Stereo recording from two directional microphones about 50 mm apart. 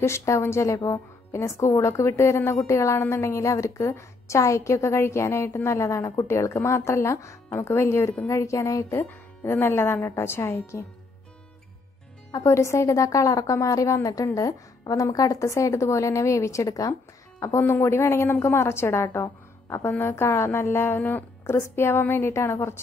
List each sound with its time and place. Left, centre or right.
0.0 s a woman's voice: left
7.4 s speech: left
8.3 s a woman's voice: left
9.6 s speech: left
10.7 s speech: left
12.4 s a woman's voice: left
17.5 s speech: left
18.3 s a woman's voice: left
19.8 s speech: left
21.5 s speech: left